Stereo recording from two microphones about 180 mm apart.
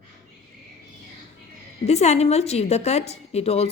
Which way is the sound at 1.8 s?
35° left (ahead or behind).